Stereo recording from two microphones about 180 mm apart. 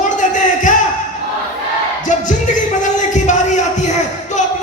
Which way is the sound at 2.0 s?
45° left (ahead or behind).